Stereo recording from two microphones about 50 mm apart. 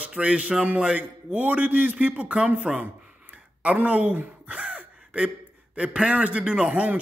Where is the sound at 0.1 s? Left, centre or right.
Right.